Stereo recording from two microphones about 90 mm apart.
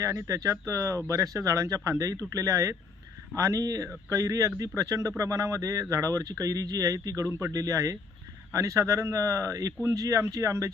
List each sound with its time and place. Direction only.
0.0 s speech: 40° right (ahead or behind)